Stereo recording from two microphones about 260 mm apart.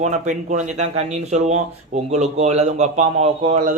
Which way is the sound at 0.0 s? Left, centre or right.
Right.